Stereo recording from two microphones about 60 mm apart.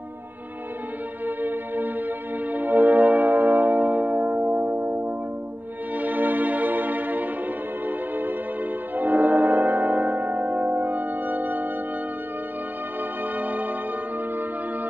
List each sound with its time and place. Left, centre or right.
1.2 s music: right
13.2 s music: right